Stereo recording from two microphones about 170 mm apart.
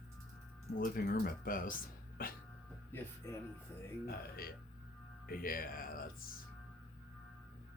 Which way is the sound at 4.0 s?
60° left (ahead or behind).